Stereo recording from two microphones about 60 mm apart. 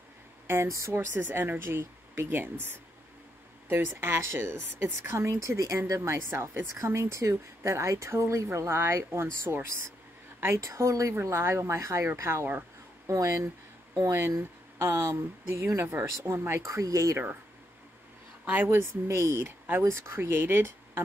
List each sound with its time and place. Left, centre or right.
0.7 s a woman's voice: right
0.9 s speech: right
3.6 s speech: right
5.3 s speech: right
5.9 s speech: right
6.8 s speech: right
10.4 s a woman's voice: right
11.2 s speech: right
14.8 s speech: right
15.8 s speech: right
16.6 s a woman's voice: right
18.4 s speech: right
18.8 s speech: right
19.8 s speech: right